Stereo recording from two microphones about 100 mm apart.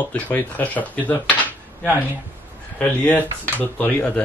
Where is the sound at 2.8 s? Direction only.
15° left (ahead or behind).